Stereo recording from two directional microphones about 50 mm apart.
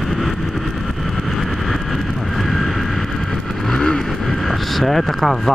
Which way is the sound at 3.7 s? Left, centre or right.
Centre.